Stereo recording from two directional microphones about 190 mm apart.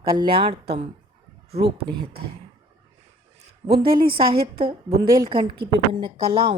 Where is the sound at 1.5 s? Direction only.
60° right (ahead or behind).